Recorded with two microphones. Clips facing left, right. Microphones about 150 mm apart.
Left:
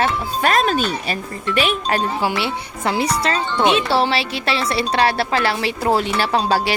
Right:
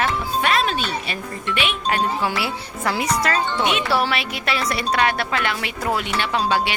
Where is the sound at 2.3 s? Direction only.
25° left (ahead or behind).